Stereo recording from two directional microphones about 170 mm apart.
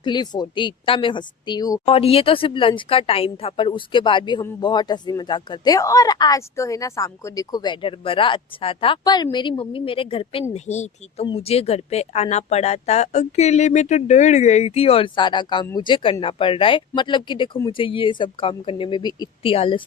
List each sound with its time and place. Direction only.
0.0 s speech: 25° left (ahead or behind)
1.8 s speech: 35° left (ahead or behind)